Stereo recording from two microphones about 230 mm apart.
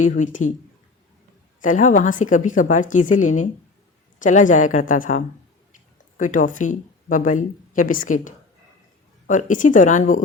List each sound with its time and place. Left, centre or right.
0.0 s speech: left
1.6 s speech: left